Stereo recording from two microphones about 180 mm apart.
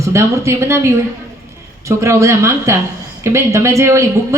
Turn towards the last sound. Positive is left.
turn(degrees=-15)  # may be behind; listen again after turning